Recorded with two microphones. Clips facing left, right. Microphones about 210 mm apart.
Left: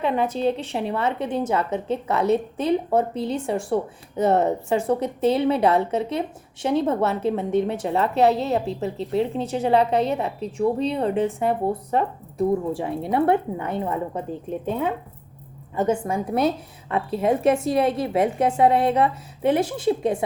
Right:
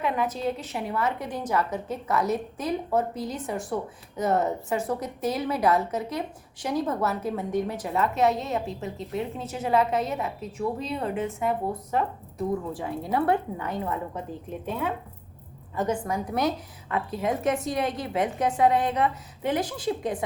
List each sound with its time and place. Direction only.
0.0 s a woman's voice: 30° left (ahead or behind)
15.7 s a woman's voice: 25° left (ahead or behind)